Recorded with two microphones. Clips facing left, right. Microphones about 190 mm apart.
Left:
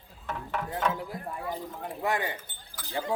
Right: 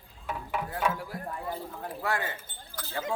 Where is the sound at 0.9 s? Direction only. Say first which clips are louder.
Left 1 dB; 20° left (ahead or behind).